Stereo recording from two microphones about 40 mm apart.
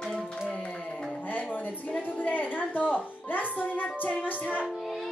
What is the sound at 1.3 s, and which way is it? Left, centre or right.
A woman's voice, left.